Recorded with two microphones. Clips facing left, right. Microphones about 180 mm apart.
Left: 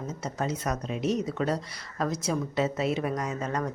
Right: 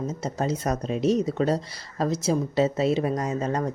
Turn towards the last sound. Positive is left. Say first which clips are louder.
# right 4 dB
turn(degrees=-30)  # may be behind; listen again after turning